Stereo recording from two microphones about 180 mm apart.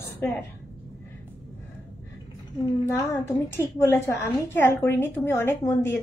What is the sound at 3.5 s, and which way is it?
A woman's voice, 15° left (ahead or behind).